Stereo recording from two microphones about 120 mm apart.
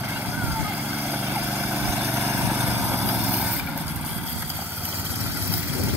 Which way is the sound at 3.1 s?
5° right (ahead or behind).